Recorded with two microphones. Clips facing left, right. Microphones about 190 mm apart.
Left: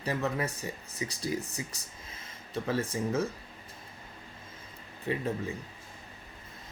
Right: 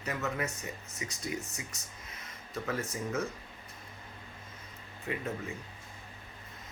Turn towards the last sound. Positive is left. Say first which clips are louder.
# left 4 dB
turn(degrees=30)  # may be behind; listen again after turning